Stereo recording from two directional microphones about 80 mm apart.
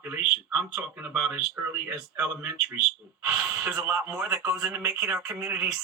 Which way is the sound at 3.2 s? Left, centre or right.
Centre.